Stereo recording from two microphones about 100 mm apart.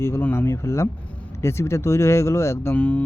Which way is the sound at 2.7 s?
15° left (ahead or behind).